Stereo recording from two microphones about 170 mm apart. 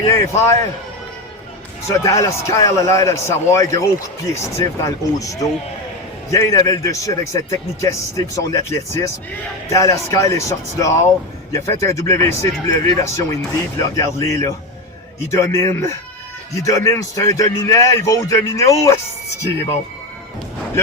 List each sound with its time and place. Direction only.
0.0 s speech: 20° left (ahead or behind)
1.9 s a man's voice: 20° left (ahead or behind)